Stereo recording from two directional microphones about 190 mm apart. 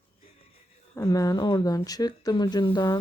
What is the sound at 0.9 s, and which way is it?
Speech, 15° left (ahead or behind).